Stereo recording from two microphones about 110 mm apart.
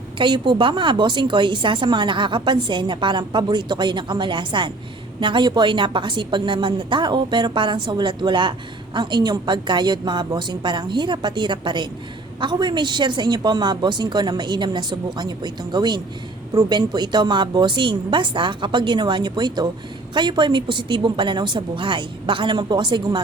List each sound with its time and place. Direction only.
0.2 s a woman's voice: 45° right (ahead or behind)